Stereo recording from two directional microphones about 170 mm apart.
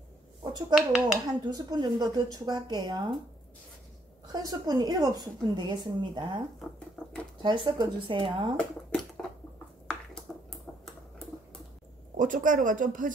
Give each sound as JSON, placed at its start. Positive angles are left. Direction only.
{"t": 0.4, "sound": "a sound", "side_deg": -25}
{"t": 0.7, "sound": "speech", "side_deg": 0}
{"t": 1.2, "sound": "a woman's voice", "side_deg": -25}
{"t": 4.3, "sound": "a woman's voice", "side_deg": -20}
{"t": 7.0, "sound": "a sound", "side_deg": 5}
{"t": 7.4, "sound": "a woman's voice", "side_deg": -30}
{"t": 10.3, "sound": "typewriter", "side_deg": 5}
{"t": 12.2, "sound": "speech", "side_deg": -50}